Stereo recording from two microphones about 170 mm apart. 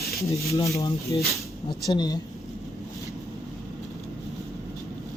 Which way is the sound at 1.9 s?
25° left (ahead or behind).